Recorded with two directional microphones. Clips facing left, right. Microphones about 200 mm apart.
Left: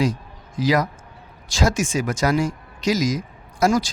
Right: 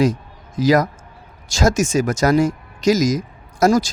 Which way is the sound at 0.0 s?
45° right (ahead or behind).